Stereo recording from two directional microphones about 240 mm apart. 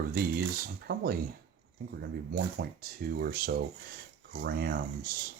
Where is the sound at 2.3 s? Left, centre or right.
Right.